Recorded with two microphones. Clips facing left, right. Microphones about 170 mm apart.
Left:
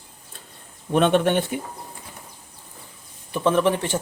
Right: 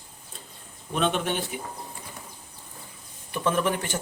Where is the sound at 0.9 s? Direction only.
60° left (ahead or behind).